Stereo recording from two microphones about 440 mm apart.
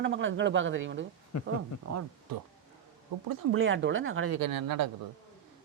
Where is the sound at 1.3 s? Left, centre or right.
Left.